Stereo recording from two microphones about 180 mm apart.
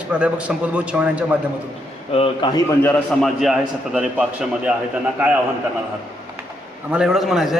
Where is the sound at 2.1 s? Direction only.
30° left (ahead or behind).